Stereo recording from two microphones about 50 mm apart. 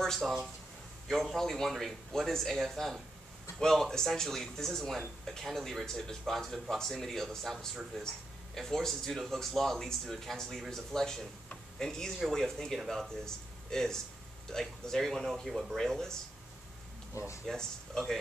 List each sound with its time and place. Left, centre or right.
0.0 s speech: centre
17.1 s speech: left
17.5 s speech: centre